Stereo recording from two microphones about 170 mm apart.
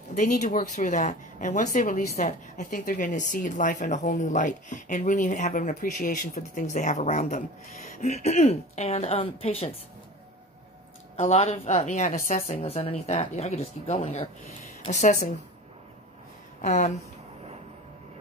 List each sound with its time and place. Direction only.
0.1 s speech: 45° left (ahead or behind)
11.1 s a woman's voice: 40° left (ahead or behind)
14.9 s speech: 45° left (ahead or behind)
16.6 s speech: 45° left (ahead or behind)